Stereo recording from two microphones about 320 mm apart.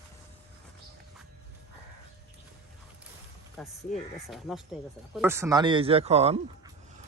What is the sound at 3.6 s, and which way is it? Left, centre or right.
Speech, centre.